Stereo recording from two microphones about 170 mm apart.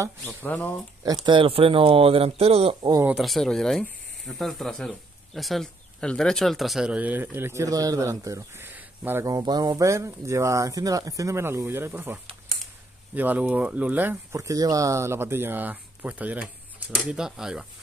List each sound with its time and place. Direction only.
0.4 s speech: 10° left (ahead or behind)
1.0 s speech: 25° right (ahead or behind)
3.1 s speech: centre (ahead or behind)